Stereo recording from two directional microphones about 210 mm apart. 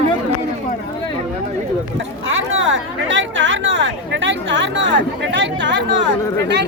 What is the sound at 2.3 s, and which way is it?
Speech, 70° right (ahead or behind).